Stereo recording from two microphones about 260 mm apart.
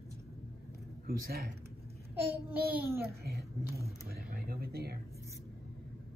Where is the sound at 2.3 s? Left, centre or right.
Centre.